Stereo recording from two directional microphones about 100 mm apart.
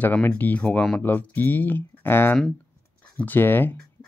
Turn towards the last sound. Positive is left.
turn(degrees=20)  # may be behind; listen again after turning